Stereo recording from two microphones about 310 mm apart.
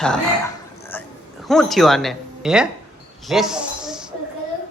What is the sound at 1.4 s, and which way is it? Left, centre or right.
Speech, centre.